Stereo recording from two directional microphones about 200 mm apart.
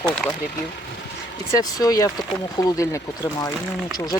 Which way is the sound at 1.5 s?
20° left (ahead or behind).